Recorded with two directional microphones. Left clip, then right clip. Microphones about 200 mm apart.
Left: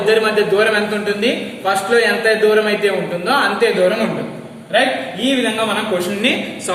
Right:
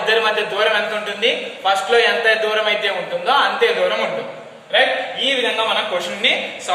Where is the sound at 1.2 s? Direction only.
25° right (ahead or behind).